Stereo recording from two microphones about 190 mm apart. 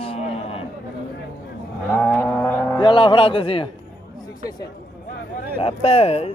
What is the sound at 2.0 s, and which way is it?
Livestock, 10° left (ahead or behind).